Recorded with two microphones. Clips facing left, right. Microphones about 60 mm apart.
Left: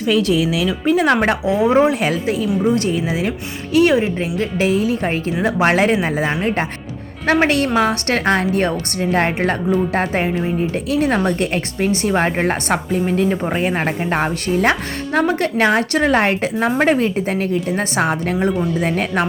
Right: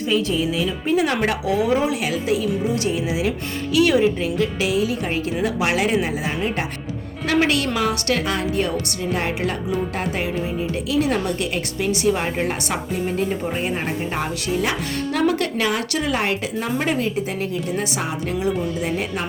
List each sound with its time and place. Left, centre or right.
0.1 s speech: left
0.9 s speech: left
1.5 s speech: left
1.7 s speech: left
15.3 s speech: left
15.6 s speech: left